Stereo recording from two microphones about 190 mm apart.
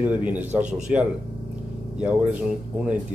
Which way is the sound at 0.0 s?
10° right (ahead or behind).